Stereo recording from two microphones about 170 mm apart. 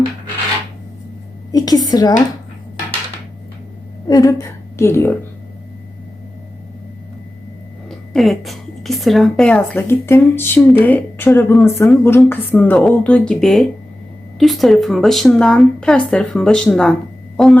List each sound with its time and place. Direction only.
1.5 s a woman's voice: 20° left (ahead or behind)
4.1 s a woman's voice: 20° left (ahead or behind)
7.9 s speech: centre (ahead or behind)